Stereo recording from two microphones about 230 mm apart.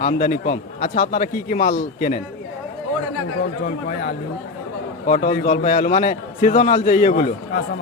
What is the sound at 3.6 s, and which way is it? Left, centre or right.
A man's voice, left.